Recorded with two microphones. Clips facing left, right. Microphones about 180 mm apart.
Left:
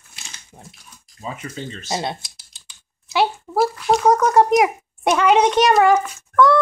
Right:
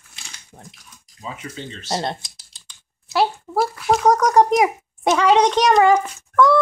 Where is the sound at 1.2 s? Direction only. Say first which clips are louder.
Left 2 dB; 45° left (ahead or behind).